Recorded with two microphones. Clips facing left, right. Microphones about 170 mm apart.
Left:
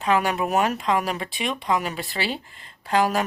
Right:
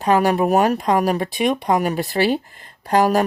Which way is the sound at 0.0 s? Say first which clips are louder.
Right 6 dB; 40° right (ahead or behind).